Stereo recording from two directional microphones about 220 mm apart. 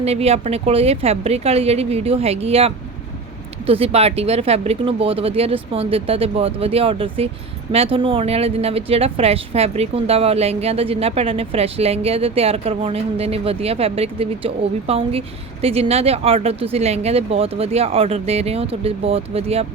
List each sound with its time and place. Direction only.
0.0 s speech: 30° right (ahead or behind)